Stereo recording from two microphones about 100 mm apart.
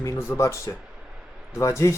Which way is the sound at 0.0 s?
25° left (ahead or behind).